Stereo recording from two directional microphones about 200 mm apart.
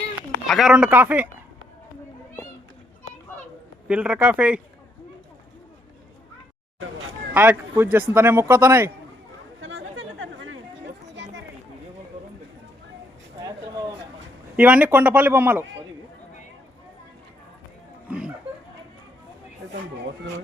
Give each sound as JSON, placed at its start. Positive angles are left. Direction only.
{"t": 0.4, "sound": "speech", "side_deg": 0}
{"t": 3.8, "sound": "speech", "side_deg": -5}
{"t": 7.3, "sound": "speech", "side_deg": -10}
{"t": 9.6, "sound": "chatter", "side_deg": -70}
{"t": 11.1, "sound": "a sound", "side_deg": -65}
{"t": 14.5, "sound": "speech", "side_deg": -5}
{"t": 18.1, "sound": "speech", "side_deg": -5}